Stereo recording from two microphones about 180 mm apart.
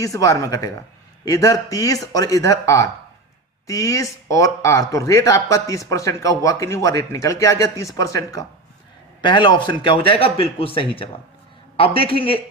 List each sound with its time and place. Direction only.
0.0 s a man's voice: 15° left (ahead or behind)